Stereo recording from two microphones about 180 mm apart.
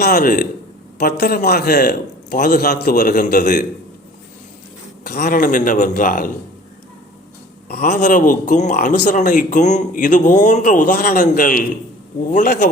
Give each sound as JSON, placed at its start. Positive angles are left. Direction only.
{"t": 0.0, "sound": "a man's voice", "side_deg": 50}
{"t": 5.0, "sound": "a man's voice", "side_deg": 60}
{"t": 7.7, "sound": "a man's voice", "side_deg": 55}